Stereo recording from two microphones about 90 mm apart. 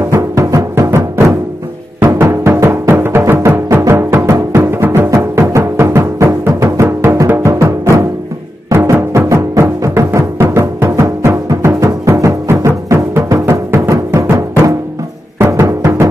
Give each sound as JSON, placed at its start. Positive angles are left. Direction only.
{"t": 0.1, "sound": "music", "side_deg": -35}
{"t": 8.9, "sound": "music", "side_deg": -30}
{"t": 15.3, "sound": "music", "side_deg": -30}